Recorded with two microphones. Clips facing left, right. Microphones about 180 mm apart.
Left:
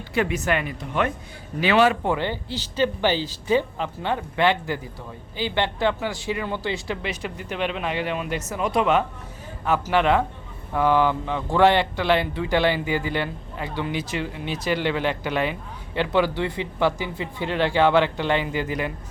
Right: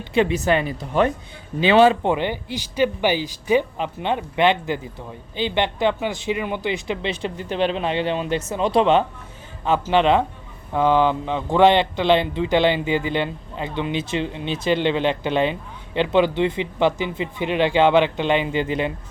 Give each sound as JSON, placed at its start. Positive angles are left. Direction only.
{"t": 0.1, "sound": "speech", "side_deg": -25}